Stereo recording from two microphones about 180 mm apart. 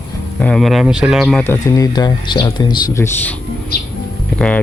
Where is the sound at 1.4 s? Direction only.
15° left (ahead or behind).